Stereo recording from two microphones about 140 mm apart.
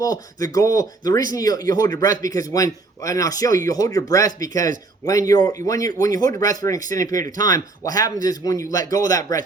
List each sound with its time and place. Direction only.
0.0 s speech: 25° left (ahead or behind)